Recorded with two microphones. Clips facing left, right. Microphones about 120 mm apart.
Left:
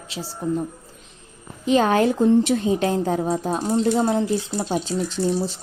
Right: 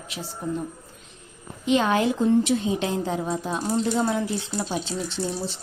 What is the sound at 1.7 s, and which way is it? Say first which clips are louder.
A woman's voice: left 3 dB; 45° left (ahead or behind).